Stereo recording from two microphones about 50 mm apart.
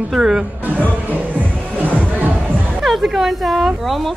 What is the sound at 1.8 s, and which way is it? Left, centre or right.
Music, right.